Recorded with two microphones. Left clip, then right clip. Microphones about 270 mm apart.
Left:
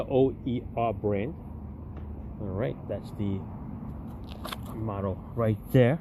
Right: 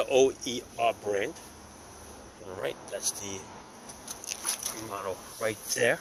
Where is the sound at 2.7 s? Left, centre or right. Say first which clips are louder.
Right 1 dB; centre.